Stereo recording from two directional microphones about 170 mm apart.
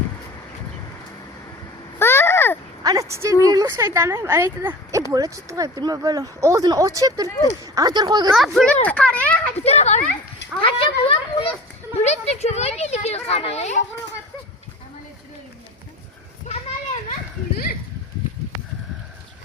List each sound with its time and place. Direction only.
2.0 s a sound: 15° left (ahead or behind)
2.8 s speech: 20° right (ahead or behind)
8.3 s speech: centre (ahead or behind)
9.6 s a child's voice: 40° left (ahead or behind)
10.6 s a sound: 30° left (ahead or behind)
11.9 s a child's voice: 40° left (ahead or behind)
16.5 s children playing: 35° left (ahead or behind)